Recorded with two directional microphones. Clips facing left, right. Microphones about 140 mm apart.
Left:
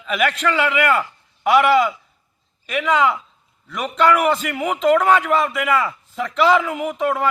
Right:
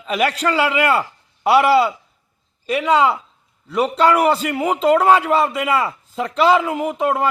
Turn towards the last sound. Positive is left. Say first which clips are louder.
# right 2 dB
turn(degrees=-30)  # may be behind; listen again after turning